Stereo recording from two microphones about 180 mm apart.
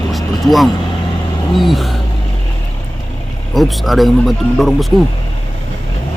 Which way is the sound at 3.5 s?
Centre (ahead or behind).